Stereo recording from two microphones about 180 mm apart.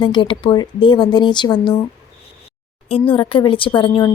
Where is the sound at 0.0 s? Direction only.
25° left (ahead or behind).